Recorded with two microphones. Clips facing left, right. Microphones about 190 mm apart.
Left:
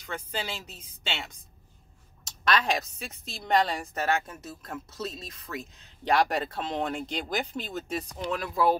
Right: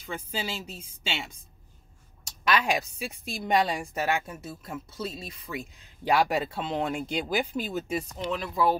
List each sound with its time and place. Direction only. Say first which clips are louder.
0.0 s a woman's voice: right 1 dB; 10° right (ahead or behind)
2.4 s a woman's voice: right 1 dB; 10° right (ahead or behind)